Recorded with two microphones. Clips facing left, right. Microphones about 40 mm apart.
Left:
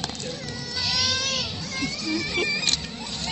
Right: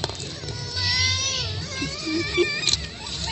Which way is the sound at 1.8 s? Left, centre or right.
Right.